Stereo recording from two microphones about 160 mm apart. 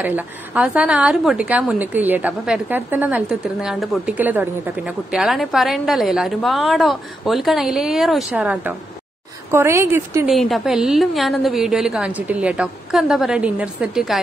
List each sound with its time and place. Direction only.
0.0 s a woman's voice: 10° right (ahead or behind)
10.2 s a woman's voice: centre (ahead or behind)